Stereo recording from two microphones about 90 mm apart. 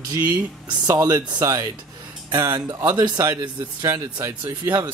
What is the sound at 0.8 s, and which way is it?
Speech, 40° right (ahead or behind).